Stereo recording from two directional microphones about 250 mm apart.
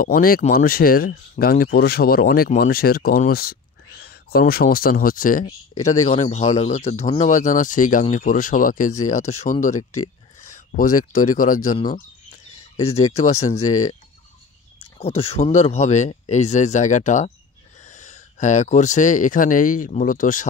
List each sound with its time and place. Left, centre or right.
0.0 s speech: left
15.0 s speech: left